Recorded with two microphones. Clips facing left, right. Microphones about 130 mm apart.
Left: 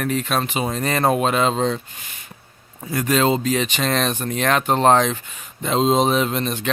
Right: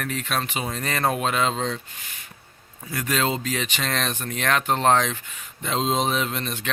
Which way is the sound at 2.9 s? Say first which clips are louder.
Left 6 dB; 25° left (ahead or behind).